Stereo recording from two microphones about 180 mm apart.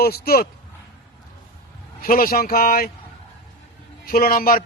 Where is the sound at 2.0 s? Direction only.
55° left (ahead or behind).